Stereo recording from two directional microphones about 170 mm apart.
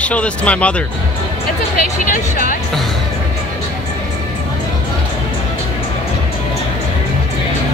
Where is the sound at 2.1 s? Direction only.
55° left (ahead or behind).